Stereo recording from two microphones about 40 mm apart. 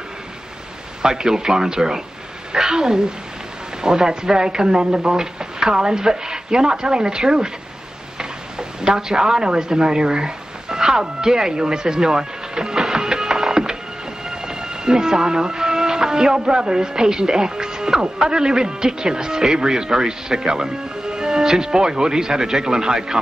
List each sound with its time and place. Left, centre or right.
1.0 s speech: centre
8.2 s a sound: centre
14.3 s speech: centre